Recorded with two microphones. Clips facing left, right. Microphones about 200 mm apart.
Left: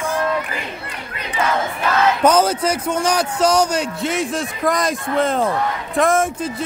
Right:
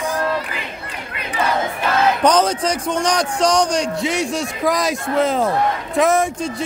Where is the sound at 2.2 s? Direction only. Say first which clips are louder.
Left 2 dB; 5° left (ahead or behind).